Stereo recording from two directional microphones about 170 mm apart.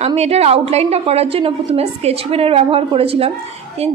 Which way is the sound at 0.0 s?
40° right (ahead or behind).